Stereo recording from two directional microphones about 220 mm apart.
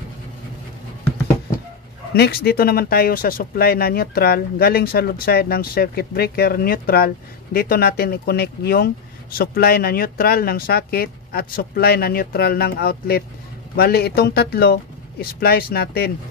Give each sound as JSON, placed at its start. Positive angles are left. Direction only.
{"t": 2.1, "sound": "speech", "side_deg": 45}